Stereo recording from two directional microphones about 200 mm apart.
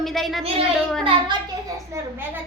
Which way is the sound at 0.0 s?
Centre (ahead or behind).